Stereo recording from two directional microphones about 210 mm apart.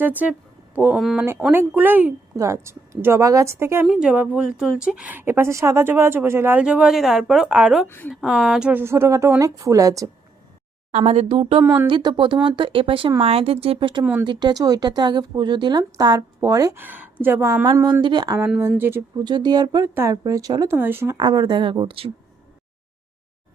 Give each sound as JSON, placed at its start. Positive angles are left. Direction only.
{"t": 0.0, "sound": "a woman's voice", "side_deg": -10}
{"t": 7.9, "sound": "a woman's voice", "side_deg": 10}
{"t": 8.1, "sound": "speech", "side_deg": -5}
{"t": 10.9, "sound": "speech", "side_deg": -30}
{"t": 11.6, "sound": "speech", "side_deg": -10}
{"t": 11.9, "sound": "speech", "side_deg": -25}
{"t": 14.0, "sound": "speech", "side_deg": -10}
{"t": 14.3, "sound": "speech", "side_deg": -20}
{"t": 21.2, "sound": "speech", "side_deg": -20}